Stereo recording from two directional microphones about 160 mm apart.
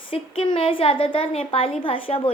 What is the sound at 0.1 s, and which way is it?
A woman's voice, 35° left (ahead or behind).